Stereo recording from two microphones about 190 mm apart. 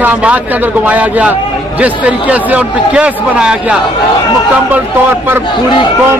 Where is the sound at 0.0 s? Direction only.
5° right (ahead or behind).